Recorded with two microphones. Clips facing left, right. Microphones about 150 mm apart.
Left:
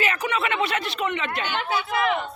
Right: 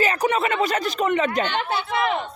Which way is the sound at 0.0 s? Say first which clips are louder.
Right 4 dB; 40° right (ahead or behind).